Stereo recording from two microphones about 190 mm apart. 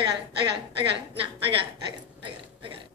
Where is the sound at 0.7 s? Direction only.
25° right (ahead or behind).